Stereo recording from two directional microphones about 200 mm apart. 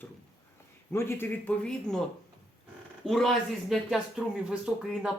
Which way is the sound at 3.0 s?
Centre (ahead or behind).